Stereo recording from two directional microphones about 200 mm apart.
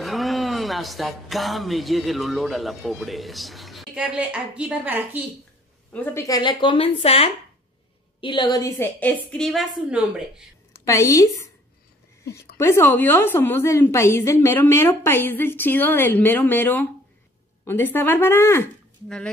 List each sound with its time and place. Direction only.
0.0 s speech: centre (ahead or behind)
5.9 s a woman's voice: 15° left (ahead or behind); by 10.4 s 5° right (ahead or behind)
10.9 s a woman's voice: 15° left (ahead or behind)
12.5 s a woman's voice: 15° left (ahead or behind)